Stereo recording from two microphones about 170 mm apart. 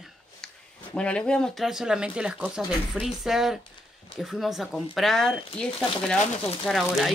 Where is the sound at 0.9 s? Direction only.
5° left (ahead or behind).